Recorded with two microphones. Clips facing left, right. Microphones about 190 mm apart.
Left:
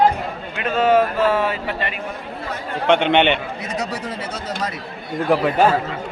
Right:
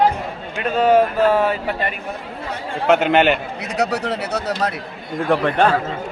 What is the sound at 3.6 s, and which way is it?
Speech, 70° right (ahead or behind).